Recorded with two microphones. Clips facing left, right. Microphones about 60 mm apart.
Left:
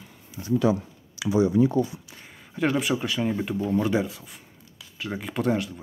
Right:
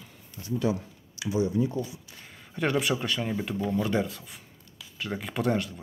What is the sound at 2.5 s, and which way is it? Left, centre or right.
Speech, centre.